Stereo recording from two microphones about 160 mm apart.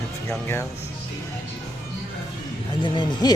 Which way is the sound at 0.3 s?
15° left (ahead or behind).